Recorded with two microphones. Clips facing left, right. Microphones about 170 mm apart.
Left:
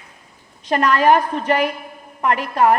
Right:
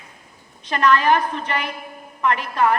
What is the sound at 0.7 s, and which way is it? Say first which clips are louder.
A woman's voice: left 3 dB; 45° left (ahead or behind).